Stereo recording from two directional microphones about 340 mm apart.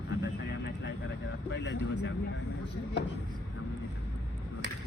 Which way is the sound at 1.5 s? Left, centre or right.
Left.